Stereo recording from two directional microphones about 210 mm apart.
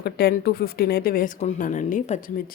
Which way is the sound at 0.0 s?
50° left (ahead or behind).